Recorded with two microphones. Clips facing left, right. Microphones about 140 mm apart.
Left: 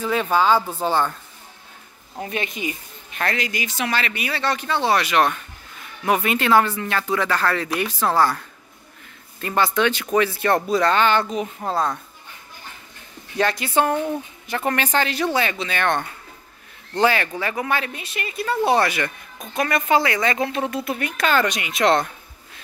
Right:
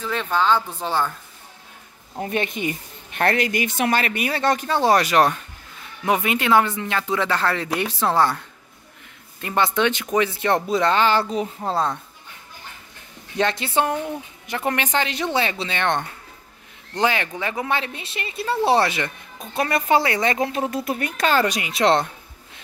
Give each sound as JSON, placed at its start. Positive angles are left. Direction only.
{"t": 0.0, "sound": "a woman's voice", "side_deg": 10}
{"t": 3.2, "sound": "speech", "side_deg": -55}
{"t": 6.0, "sound": "speech", "side_deg": -20}
{"t": 13.4, "sound": "speech", "side_deg": -25}
{"t": 20.7, "sound": "speech", "side_deg": -40}